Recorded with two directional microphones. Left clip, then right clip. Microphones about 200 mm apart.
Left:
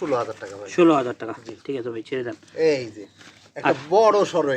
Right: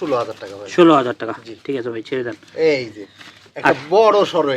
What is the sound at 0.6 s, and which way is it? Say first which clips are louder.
Speech: right 6 dB; 15° right (ahead or behind).